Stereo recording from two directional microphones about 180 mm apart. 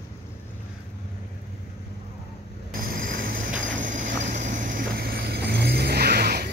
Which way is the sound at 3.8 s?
45° right (ahead or behind).